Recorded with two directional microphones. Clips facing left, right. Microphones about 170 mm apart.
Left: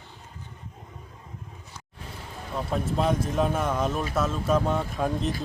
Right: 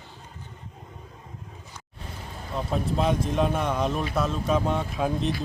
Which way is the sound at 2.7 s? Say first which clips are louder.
Even; centre (ahead or behind).